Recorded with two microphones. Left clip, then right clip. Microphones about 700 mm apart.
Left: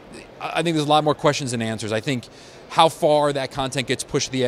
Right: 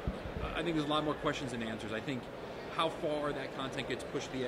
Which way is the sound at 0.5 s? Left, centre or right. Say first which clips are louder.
Left 15 dB; left.